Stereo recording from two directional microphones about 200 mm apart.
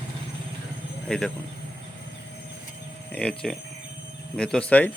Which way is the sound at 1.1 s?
Centre (ahead or behind).